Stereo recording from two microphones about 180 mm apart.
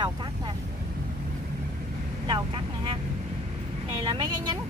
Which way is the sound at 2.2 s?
25° right (ahead or behind).